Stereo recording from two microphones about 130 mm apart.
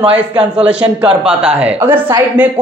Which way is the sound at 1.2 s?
10° right (ahead or behind).